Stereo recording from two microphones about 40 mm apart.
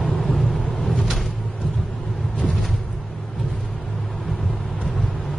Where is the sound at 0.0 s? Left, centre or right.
Centre.